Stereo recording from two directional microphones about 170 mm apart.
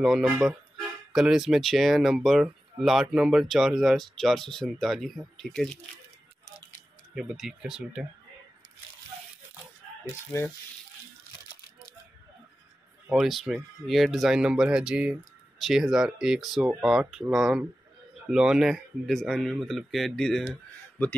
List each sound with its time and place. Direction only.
0.0 s speech: 5° right (ahead or behind)
7.2 s speech: 5° right (ahead or behind)
10.3 s speech: 15° left (ahead or behind)
13.0 s speech: 5° right (ahead or behind)